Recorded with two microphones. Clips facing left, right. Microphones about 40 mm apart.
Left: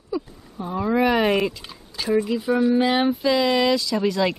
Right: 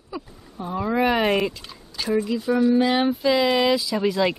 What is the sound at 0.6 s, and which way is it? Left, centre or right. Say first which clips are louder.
Speech: left 1 dB; centre.